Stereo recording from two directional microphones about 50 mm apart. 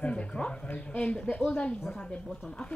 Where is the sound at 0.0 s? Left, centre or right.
Left.